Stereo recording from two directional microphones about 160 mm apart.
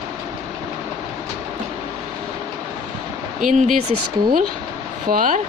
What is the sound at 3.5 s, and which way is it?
Speech, 50° right (ahead or behind).